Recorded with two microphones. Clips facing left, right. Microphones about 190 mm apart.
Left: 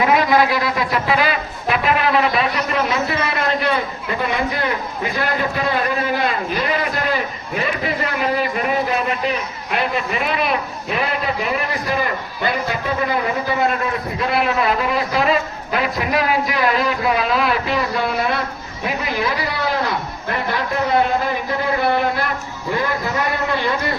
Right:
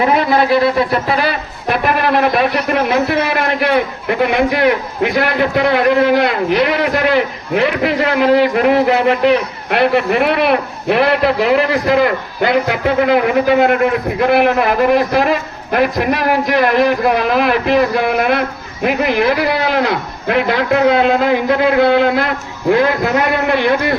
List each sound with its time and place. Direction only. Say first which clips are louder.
0.0 s speech: right 2 dB; 30° right (ahead or behind)
0.9 s speech: right 3 dB; 40° right (ahead or behind)
1.7 s a man's voice: right 3 dB; 55° right (ahead or behind)